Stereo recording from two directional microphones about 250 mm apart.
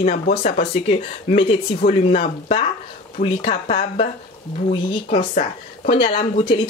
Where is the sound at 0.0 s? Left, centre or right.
Left.